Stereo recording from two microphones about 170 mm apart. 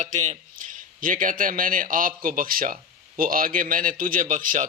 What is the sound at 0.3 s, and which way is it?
A man's voice, 50° right (ahead or behind).